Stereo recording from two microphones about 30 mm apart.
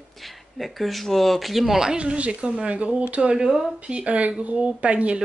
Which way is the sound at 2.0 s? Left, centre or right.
Right.